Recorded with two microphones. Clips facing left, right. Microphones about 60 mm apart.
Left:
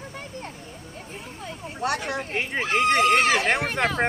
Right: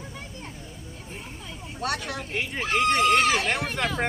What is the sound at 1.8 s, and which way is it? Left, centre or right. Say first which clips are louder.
Speech: left 3 dB; left.